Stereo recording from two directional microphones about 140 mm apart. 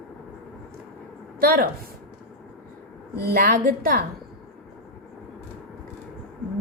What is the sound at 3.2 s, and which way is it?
Speech, 90° right.